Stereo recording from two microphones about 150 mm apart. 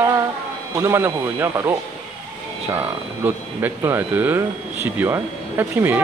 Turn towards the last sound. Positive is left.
turn(degrees=-10)  # may be behind; listen again after turning